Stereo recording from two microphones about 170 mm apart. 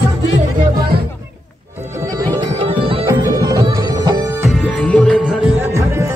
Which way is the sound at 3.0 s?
20° right (ahead or behind).